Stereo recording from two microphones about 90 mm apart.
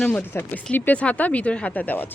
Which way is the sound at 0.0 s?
15° left (ahead or behind).